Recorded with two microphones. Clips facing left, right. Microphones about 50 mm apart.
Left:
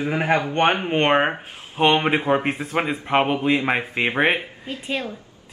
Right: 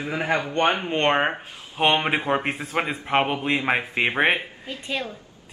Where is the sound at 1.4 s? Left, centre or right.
Left.